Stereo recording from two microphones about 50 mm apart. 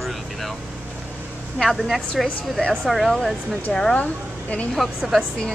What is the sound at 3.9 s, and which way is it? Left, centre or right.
Speech, left.